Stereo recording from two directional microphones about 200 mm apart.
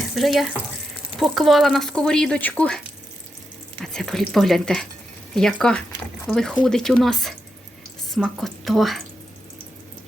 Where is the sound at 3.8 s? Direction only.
Centre (ahead or behind).